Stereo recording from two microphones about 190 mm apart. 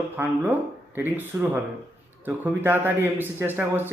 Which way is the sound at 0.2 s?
10° right (ahead or behind).